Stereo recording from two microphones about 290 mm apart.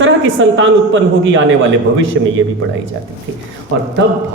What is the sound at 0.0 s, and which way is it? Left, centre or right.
A man's voice, right.